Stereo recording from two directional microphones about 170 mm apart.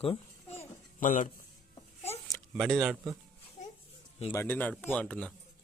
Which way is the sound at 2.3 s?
Centre (ahead or behind).